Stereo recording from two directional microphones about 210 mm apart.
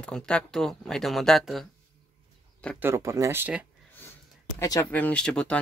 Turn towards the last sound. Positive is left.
turn(degrees=5)  # may be behind; listen again after turning